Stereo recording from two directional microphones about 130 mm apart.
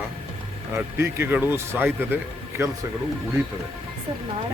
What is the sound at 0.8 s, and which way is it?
Speech, 15° right (ahead or behind).